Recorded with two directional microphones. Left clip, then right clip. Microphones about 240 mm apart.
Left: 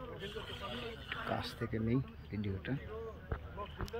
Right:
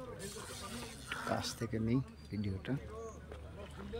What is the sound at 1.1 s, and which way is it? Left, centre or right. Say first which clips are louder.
Speech: right 2 dB; centre.